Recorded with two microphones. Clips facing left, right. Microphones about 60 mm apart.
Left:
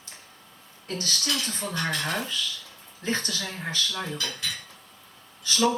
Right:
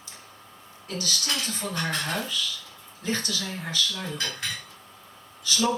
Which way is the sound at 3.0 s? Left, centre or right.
Left.